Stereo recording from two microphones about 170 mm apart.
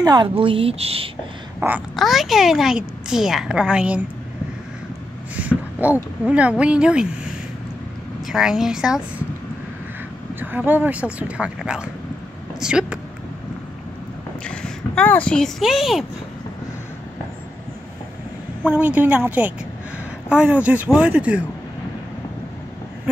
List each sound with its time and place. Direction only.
0.0 s a woman's voice: 25° right (ahead or behind)
1.6 s speech: 15° right (ahead or behind)
2.0 s a woman's voice: centre (ahead or behind)
5.5 s speech: 10° right (ahead or behind)
8.3 s a woman's voice: 5° right (ahead or behind)
10.4 s speech: 10° right (ahead or behind)
14.4 s speech: 5° left (ahead or behind)
18.7 s speech: 10° right (ahead or behind)